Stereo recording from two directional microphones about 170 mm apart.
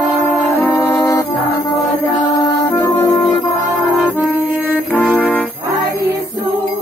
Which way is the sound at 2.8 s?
25° left (ahead or behind).